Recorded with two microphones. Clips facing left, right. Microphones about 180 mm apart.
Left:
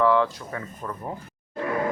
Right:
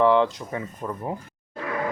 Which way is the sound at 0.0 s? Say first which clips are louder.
Right 2 dB; 25° right (ahead or behind).